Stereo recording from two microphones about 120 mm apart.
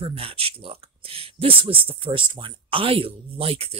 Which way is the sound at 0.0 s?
50° right (ahead or behind).